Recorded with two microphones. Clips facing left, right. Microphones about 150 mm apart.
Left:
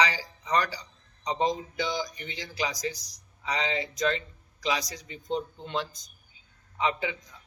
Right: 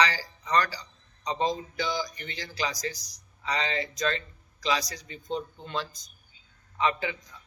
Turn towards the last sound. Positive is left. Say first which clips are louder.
# right 1 dB
turn(degrees=15)  # may be behind; listen again after turning